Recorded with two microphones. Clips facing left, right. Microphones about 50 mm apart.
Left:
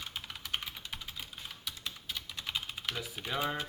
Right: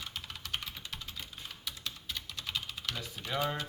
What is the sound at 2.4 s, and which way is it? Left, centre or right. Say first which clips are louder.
Typing: left 1 dB; centre.